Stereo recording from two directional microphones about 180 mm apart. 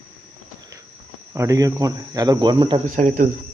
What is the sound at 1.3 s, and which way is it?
Speech, 15° right (ahead or behind).